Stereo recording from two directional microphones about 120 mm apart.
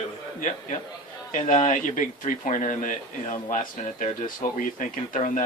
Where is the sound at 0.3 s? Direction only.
90° left.